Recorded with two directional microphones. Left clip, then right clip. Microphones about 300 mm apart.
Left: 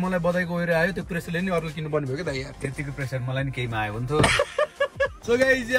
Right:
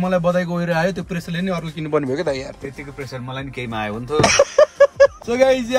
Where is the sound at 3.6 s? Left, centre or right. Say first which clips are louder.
Right 7 dB; centre.